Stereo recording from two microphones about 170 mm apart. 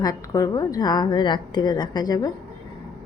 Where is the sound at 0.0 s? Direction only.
20° left (ahead or behind).